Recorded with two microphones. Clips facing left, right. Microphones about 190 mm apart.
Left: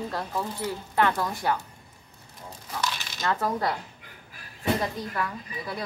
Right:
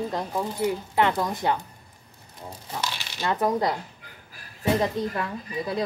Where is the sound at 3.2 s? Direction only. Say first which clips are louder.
Right 3 dB; 20° right (ahead or behind).